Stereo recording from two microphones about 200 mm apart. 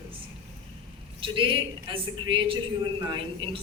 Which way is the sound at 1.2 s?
25° right (ahead or behind).